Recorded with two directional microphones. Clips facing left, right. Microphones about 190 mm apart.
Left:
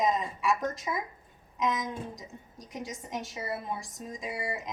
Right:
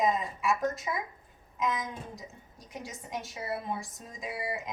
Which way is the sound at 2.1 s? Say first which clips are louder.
Left 1 dB; centre (ahead or behind).